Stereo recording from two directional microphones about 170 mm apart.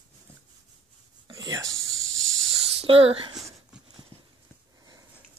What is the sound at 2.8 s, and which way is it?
Speech, 35° right (ahead or behind).